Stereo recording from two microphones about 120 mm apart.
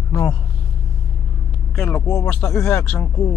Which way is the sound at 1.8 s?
15° left (ahead or behind).